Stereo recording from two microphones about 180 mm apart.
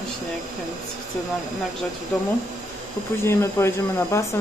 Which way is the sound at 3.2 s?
15° left (ahead or behind).